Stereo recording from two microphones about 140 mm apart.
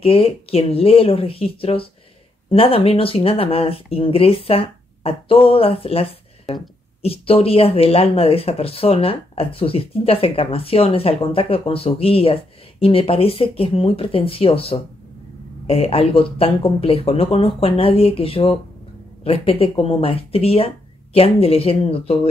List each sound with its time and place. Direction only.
0.0 s speech: 45° left (ahead or behind)